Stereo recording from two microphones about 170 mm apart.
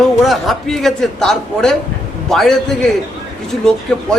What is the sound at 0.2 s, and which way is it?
Speech, centre (ahead or behind).